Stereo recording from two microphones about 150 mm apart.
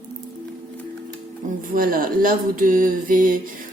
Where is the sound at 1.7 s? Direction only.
70° right (ahead or behind).